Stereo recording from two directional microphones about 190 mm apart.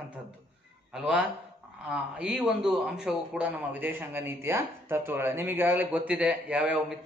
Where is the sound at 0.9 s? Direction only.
5° right (ahead or behind).